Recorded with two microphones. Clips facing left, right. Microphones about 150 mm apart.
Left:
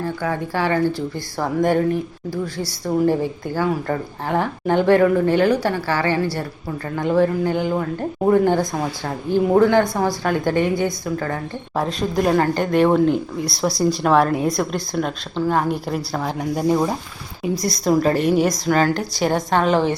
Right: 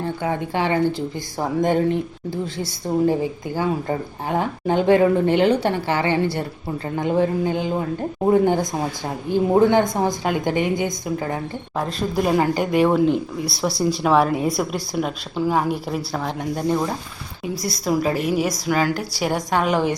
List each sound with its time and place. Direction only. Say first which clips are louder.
0.0 s a woman's voice: even; 20° right (ahead or behind)
11.8 s speech: left 2 dB; centre (ahead or behind)
17.5 s a woman's voice: left 4 dB; 5° right (ahead or behind)